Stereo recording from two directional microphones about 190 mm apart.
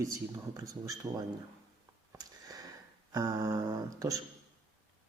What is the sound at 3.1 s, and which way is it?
A man's voice, 20° right (ahead or behind).